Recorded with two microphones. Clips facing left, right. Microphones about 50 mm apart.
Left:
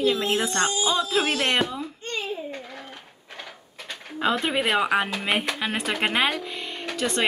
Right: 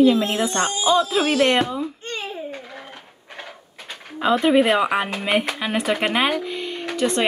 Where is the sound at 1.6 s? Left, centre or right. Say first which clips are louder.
Right 3 dB; right.